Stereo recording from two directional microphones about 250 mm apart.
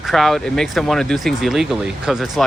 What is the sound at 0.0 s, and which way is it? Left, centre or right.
Speech, centre.